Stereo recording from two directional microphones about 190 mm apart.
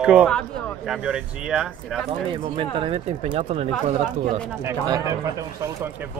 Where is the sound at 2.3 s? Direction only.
25° right (ahead or behind).